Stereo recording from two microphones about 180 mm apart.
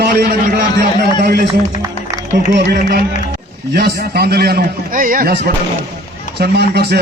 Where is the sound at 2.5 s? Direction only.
65° right (ahead or behind).